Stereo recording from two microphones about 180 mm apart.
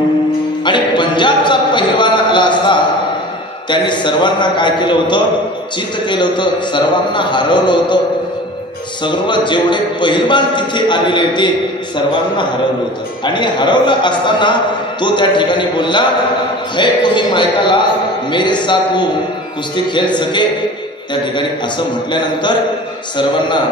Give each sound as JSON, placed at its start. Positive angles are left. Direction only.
{"t": 0.7, "sound": "music", "side_deg": 25}
{"t": 3.7, "sound": "speech", "side_deg": 25}
{"t": 9.0, "sound": "speech", "side_deg": 25}
{"t": 13.2, "sound": "speech", "side_deg": 25}